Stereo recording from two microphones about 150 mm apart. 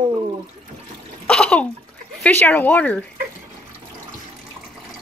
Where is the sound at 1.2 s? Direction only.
5° left (ahead or behind).